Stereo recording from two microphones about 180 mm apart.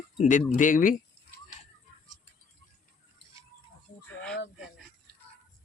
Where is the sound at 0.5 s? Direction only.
45° left (ahead or behind).